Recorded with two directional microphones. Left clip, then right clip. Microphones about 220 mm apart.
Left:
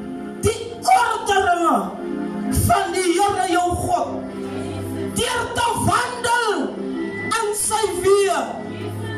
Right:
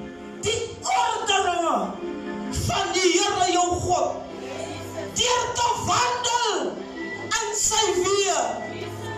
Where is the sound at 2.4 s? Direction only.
55° left (ahead or behind).